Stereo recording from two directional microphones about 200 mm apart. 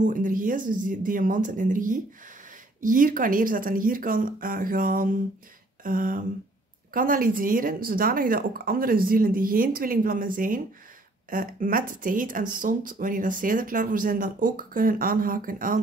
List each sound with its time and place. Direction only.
0.0 s speech: 40° right (ahead or behind)